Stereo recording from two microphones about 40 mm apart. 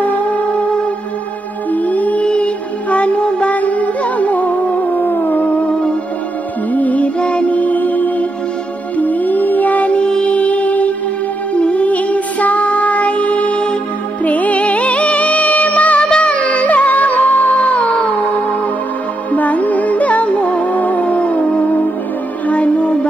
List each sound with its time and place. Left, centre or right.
1.7 s music: left
2.2 s music: left
3.5 s music: left
6.7 s music: left
7.2 s music: left
10.3 s music: left
16.0 s music: left
19.3 s music: left